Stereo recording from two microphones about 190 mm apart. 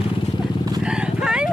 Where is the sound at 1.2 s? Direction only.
5° right (ahead or behind).